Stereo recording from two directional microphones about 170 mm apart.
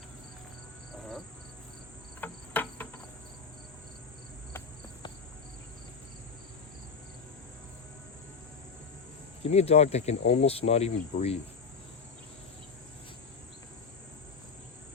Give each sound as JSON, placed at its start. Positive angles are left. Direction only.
{"t": 2.2, "sound": "cricket", "side_deg": 10}
{"t": 9.4, "sound": "cricket", "side_deg": 35}